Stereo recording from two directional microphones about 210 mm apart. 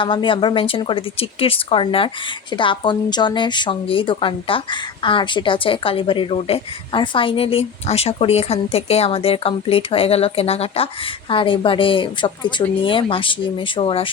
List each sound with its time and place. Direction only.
0.0 s speech: 25° left (ahead or behind)